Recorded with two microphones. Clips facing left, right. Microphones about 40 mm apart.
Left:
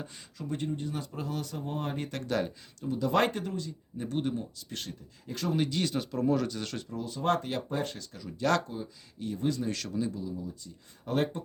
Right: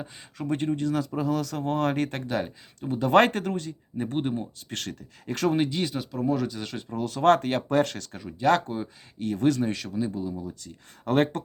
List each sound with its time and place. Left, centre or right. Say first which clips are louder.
0.3 s speech: right 7 dB; right
1.5 s speech: right 9 dB; right
2.2 s speech: right 2 dB; centre
2.8 s speech: right 7 dB; right
4.7 s speech: right 5 dB; right
5.5 s speech: right 4 dB; right
5.8 s speech: right 2 dB; centre
7.0 s speech: right 9 dB; right
7.7 s speech: right 10 dB; right
8.2 s speech: right 5 dB; right
8.6 s speech: right 6 dB; right
9.7 s speech: right 3 dB; centre
10.2 s speech: right 5 dB; right